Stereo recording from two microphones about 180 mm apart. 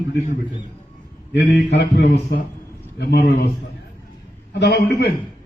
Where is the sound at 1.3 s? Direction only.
70° left (ahead or behind).